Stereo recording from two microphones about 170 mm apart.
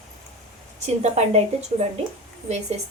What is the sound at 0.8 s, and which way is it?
Speech, 40° right (ahead or behind).